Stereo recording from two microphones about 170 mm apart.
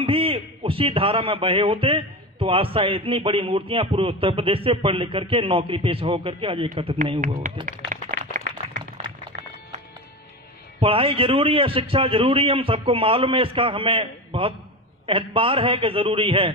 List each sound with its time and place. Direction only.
0.0 s a man's voice: 30° right (ahead or behind)
7.9 s a sound: 50° right (ahead or behind)
9.0 s music: 40° right (ahead or behind)
10.8 s a man's voice: 30° right (ahead or behind)